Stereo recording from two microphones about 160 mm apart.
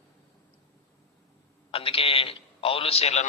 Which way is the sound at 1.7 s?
35° left (ahead or behind).